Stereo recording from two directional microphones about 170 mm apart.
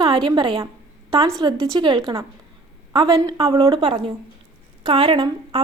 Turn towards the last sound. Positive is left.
turn(degrees=-25)  # may be behind; listen again after turning